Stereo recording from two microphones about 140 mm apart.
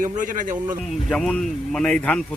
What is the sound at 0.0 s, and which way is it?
Speech, 70° right (ahead or behind).